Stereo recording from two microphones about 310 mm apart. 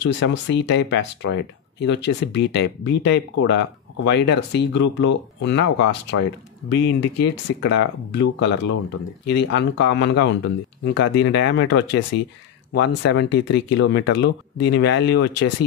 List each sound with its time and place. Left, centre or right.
0.0 s speech: left